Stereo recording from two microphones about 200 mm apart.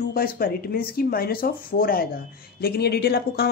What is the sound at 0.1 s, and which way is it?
Speech, 50° left (ahead or behind).